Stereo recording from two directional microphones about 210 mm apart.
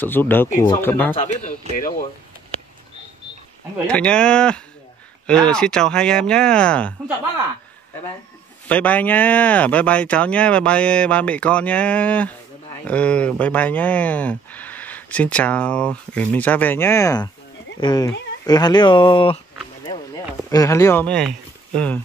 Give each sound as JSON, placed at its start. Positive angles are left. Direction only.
{"t": 0.0, "sound": "speech", "side_deg": 10}
{"t": 1.8, "sound": "speech", "side_deg": 40}
{"t": 3.8, "sound": "speech", "side_deg": 5}
{"t": 8.6, "sound": "speech", "side_deg": 5}
{"t": 20.4, "sound": "speech", "side_deg": 15}